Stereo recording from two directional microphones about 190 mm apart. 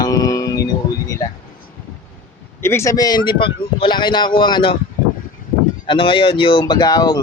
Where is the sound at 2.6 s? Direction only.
15° left (ahead or behind).